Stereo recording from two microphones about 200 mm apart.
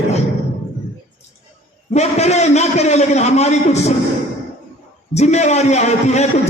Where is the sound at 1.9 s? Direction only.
35° left (ahead or behind).